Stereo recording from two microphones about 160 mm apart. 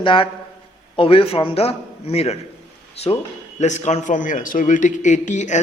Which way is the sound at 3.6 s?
45° left (ahead or behind).